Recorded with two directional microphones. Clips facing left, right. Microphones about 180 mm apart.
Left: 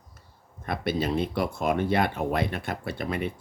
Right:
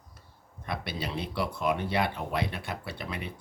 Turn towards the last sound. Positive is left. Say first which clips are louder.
# left 8 dB
turn(degrees=50)  # may be behind; listen again after turning